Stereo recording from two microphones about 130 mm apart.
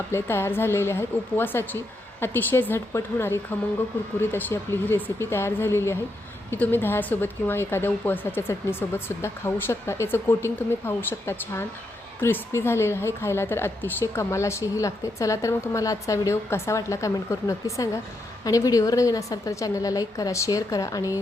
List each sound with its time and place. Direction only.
0.1 s a woman's voice: 20° left (ahead or behind)